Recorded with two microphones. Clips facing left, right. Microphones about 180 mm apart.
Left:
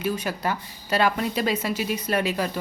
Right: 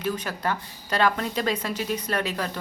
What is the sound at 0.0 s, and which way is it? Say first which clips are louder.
A woman's voice: left 2 dB; 10° left (ahead or behind).